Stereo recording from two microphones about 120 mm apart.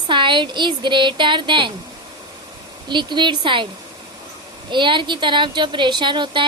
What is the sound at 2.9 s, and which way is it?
Speech, 40° right (ahead or behind).